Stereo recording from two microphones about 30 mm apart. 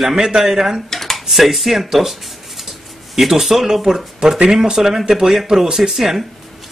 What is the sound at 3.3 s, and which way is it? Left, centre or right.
Speech, centre.